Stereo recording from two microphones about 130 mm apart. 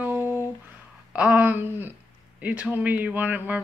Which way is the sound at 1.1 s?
10° right (ahead or behind).